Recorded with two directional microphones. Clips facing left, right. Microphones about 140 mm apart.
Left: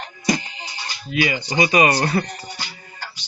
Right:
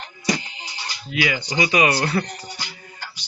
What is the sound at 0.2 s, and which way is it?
Music, 45° left (ahead or behind).